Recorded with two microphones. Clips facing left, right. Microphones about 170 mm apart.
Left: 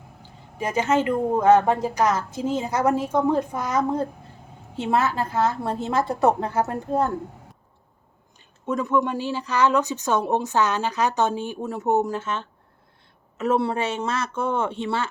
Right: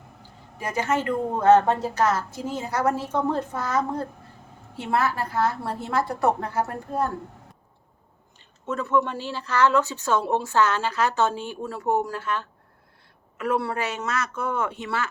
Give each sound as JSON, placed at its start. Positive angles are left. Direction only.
{"t": 0.6, "sound": "a woman's voice", "side_deg": 20}
{"t": 8.6, "sound": "a woman's voice", "side_deg": 15}